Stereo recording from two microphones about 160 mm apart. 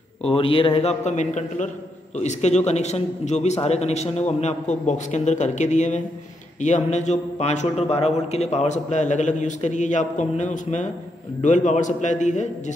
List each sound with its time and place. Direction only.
0.3 s a man's voice: 35° left (ahead or behind)